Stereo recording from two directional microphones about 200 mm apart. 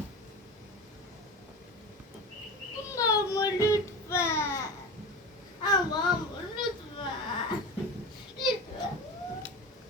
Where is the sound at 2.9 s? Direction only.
15° left (ahead or behind).